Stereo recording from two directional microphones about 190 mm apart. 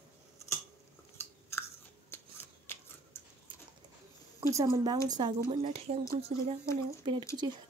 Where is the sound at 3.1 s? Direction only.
10° left (ahead or behind).